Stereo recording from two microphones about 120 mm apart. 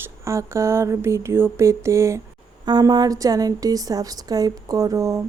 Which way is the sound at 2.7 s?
35° right (ahead or behind).